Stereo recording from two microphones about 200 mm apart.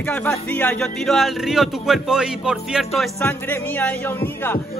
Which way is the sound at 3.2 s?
10° left (ahead or behind).